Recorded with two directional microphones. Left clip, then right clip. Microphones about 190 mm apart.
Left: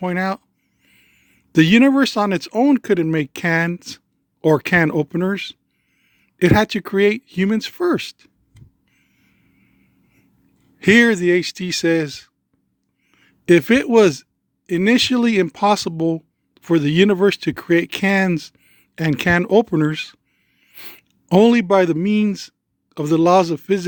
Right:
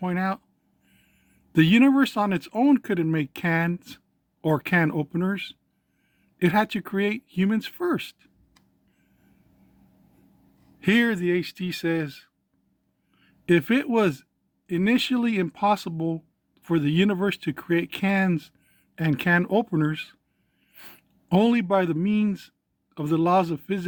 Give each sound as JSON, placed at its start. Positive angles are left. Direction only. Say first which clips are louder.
{"t": 0.0, "sound": "speech", "louder": "left 6 dB", "side_deg": 50}
{"t": 10.8, "sound": "speech", "louder": "left 10 dB", "side_deg": 50}